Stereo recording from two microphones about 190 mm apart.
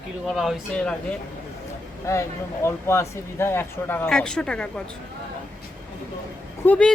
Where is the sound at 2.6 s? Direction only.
15° left (ahead or behind).